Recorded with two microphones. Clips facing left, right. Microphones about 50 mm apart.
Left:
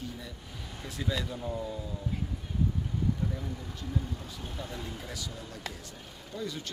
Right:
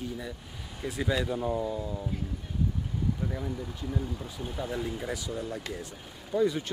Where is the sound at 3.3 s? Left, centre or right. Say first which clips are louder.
Right 4 dB; centre.